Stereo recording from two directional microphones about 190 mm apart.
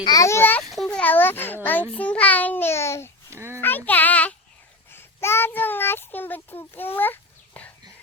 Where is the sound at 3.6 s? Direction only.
10° left (ahead or behind).